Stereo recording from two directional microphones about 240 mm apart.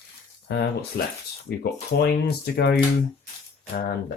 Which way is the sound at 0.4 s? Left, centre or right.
Left.